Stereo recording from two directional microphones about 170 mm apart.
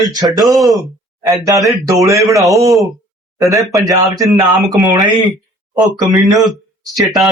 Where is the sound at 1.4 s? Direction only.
20° right (ahead or behind).